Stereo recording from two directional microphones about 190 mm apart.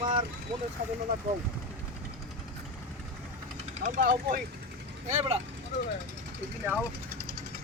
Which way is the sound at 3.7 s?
40° right (ahead or behind).